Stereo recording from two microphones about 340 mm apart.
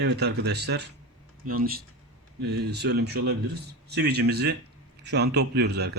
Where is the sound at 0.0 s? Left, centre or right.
Right.